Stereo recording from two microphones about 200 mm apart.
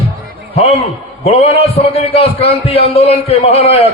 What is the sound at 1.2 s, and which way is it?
A man's voice, 30° left (ahead or behind).